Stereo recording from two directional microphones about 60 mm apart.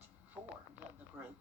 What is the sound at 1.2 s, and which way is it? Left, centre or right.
Speech, right.